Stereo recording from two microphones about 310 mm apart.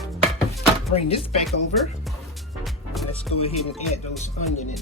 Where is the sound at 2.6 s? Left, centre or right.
Centre.